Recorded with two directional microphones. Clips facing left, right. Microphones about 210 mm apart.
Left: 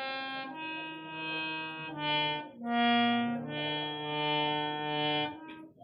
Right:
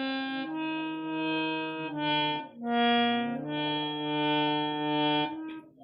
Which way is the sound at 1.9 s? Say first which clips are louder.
Right 3 dB; 35° right (ahead or behind).